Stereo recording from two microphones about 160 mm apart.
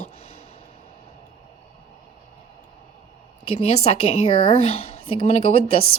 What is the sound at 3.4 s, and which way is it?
A woman's voice, 35° left (ahead or behind).